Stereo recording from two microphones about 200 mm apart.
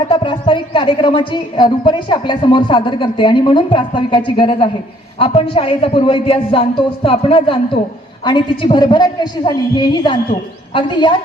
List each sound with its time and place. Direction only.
0.1 s speech: 25° left (ahead or behind)